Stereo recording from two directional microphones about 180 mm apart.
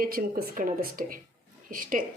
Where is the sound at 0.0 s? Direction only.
55° right (ahead or behind).